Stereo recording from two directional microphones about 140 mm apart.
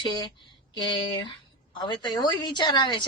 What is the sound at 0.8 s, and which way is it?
A woman's voice, 30° left (ahead or behind).